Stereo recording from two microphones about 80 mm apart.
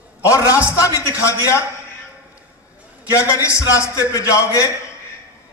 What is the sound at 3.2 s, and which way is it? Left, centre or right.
A man's voice, left.